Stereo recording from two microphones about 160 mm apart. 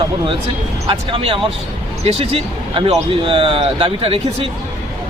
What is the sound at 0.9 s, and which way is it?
A man's voice, 35° right (ahead or behind).